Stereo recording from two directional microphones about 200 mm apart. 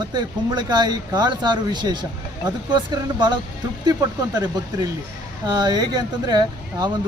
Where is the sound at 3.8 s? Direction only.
20° right (ahead or behind).